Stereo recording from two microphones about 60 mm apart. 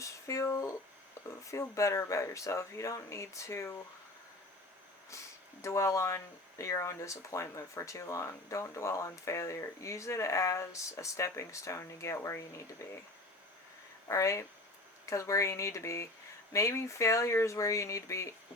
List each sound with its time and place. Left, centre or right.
0.0 s speech: left
5.1 s a sound: left
5.6 s speech: left
14.1 s speech: left